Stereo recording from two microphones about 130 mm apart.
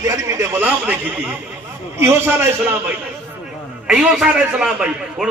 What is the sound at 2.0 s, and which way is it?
Speech, 20° right (ahead or behind).